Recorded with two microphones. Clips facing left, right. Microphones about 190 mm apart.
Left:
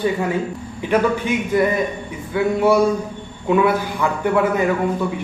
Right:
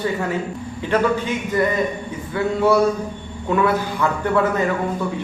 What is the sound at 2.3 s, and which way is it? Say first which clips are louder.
Mantra: left 1 dB; 15° left (ahead or behind).